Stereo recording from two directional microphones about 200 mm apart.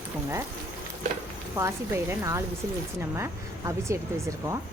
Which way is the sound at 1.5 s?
10° right (ahead or behind).